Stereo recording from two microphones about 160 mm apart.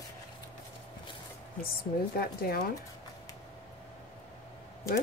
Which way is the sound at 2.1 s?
75° left (ahead or behind).